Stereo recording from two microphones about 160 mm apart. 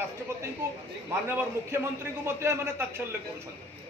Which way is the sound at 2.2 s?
15° right (ahead or behind).